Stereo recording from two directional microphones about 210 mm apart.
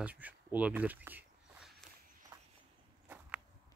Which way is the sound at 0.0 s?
10° right (ahead or behind).